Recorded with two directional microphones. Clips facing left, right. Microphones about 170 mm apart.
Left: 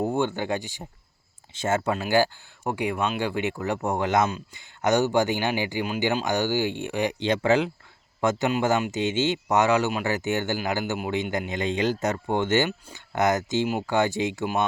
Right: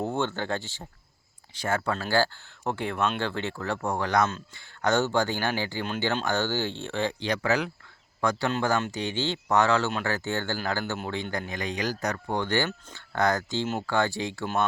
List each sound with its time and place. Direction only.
0.0 s speech: 15° left (ahead or behind)